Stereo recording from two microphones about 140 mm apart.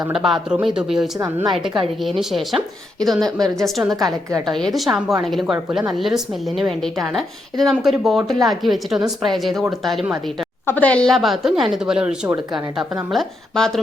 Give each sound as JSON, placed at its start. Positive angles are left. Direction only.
{"t": 0.1, "sound": "a woman's voice", "side_deg": -5}
{"t": 4.0, "sound": "a woman's voice", "side_deg": -20}
{"t": 4.4, "sound": "a woman's voice", "side_deg": 0}
{"t": 10.7, "sound": "a woman's voice", "side_deg": 10}